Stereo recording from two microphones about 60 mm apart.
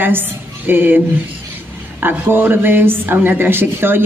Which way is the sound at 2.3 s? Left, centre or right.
Right.